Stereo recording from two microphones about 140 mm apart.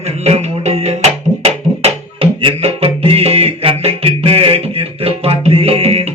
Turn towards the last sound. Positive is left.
turn(degrees=-45)  # may be behind; listen again after turning